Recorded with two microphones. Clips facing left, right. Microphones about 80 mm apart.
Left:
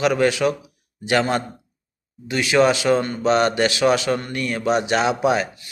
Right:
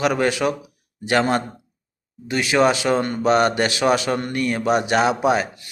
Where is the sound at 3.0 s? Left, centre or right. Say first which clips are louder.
Right 1 dB; right.